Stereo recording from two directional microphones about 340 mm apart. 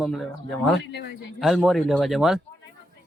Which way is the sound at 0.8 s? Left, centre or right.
Left.